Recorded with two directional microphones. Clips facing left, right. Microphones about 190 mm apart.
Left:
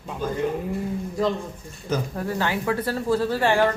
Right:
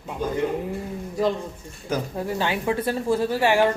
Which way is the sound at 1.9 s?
15° right (ahead or behind).